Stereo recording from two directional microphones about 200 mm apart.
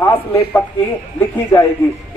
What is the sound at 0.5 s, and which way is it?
Speech, 15° left (ahead or behind).